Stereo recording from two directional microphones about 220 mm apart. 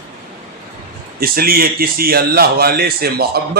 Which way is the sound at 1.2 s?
40° right (ahead or behind).